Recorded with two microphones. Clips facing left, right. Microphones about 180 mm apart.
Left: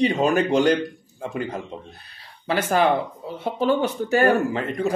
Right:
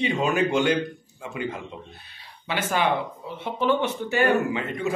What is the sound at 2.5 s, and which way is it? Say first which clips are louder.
Speech: left 5 dB; 40° left (ahead or behind).